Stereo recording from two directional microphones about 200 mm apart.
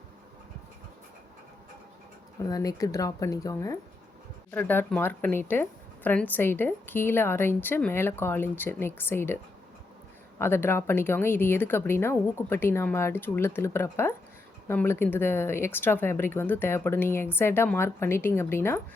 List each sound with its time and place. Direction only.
2.5 s a woman's voice: 15° left (ahead or behind)